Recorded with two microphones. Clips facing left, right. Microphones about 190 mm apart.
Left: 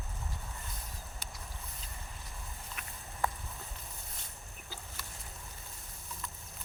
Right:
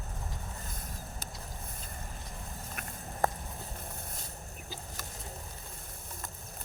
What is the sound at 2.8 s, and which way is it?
Walk, 50° right (ahead or behind).